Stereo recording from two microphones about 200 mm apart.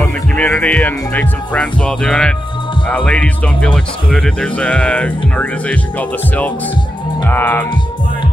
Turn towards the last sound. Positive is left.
turn(degrees=10)  # may be behind; listen again after turning